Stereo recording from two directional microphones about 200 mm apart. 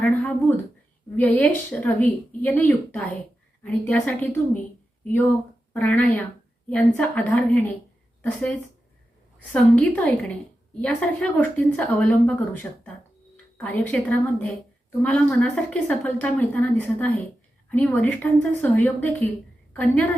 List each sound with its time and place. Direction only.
0.0 s a sound: 5° left (ahead or behind)
1.1 s speech: 10° left (ahead or behind)
5.7 s speech: 10° left (ahead or behind)